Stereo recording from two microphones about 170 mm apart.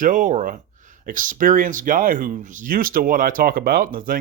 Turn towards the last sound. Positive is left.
turn(degrees=-55)  # may be behind; listen again after turning